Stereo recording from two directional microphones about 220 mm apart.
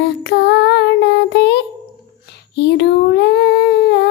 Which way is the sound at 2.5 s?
50° left (ahead or behind).